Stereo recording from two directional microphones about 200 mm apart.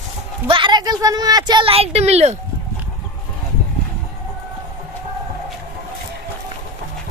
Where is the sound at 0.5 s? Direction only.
25° right (ahead or behind).